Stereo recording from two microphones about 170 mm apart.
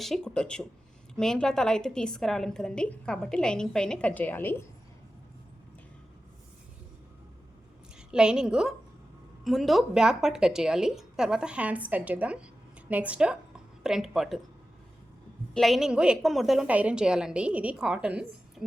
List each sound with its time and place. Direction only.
0.0 s a woman's voice: 5° left (ahead or behind)
7.9 s a woman's voice: 5° right (ahead or behind)
15.5 s a woman's voice: centre (ahead or behind)